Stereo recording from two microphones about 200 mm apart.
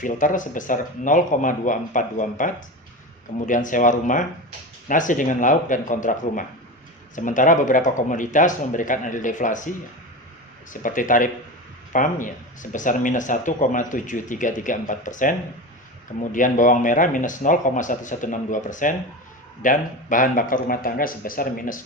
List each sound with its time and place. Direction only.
0.0 s speech: 40° left (ahead or behind)